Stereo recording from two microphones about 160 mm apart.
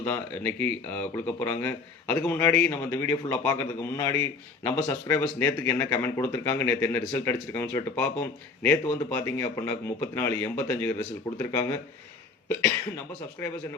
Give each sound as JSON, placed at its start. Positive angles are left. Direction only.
{"t": 0.0, "sound": "speech", "side_deg": 10}
{"t": 13.4, "sound": "speech", "side_deg": 15}